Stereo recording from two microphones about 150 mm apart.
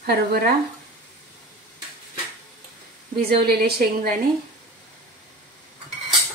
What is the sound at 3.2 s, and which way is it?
Speech, 90° right.